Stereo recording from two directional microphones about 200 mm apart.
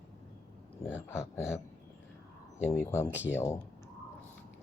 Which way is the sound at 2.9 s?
15° left (ahead or behind).